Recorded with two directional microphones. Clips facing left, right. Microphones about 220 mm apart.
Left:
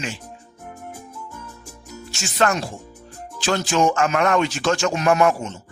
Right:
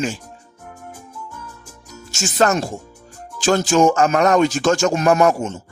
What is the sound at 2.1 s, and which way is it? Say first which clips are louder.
Music: right 7 dB; 45° right (ahead or behind).